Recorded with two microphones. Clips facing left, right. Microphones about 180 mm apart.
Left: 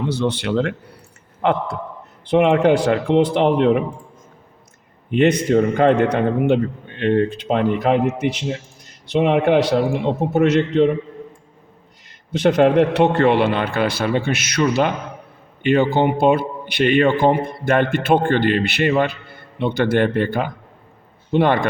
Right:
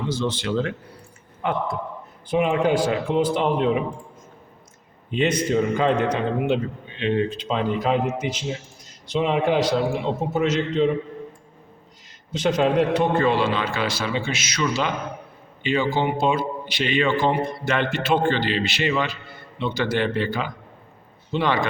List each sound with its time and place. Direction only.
0.0 s a man's voice: 65° left (ahead or behind)
5.1 s a man's voice: 60° left (ahead or behind)
12.3 s a man's voice: 60° left (ahead or behind)